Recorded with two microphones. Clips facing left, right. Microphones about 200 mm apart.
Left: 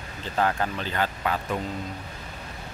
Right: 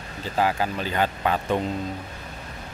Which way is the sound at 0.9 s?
20° right (ahead or behind).